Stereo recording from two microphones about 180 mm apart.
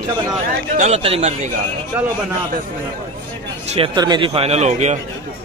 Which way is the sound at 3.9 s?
25° right (ahead or behind).